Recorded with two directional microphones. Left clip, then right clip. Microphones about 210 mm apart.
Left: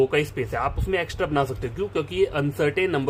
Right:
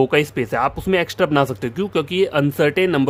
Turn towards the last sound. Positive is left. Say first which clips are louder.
# right 6 dB
turn(degrees=-45)  # may be behind; listen again after turning